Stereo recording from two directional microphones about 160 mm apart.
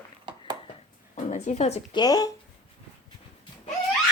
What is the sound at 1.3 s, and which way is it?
Speech, 45° left (ahead or behind).